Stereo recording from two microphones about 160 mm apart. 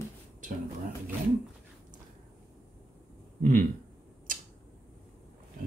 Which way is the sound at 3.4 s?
55° right (ahead or behind).